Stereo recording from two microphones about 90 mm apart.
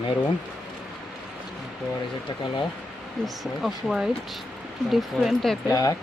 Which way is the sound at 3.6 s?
Centre (ahead or behind).